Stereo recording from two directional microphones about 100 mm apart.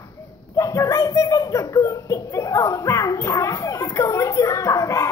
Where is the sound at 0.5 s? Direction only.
35° left (ahead or behind).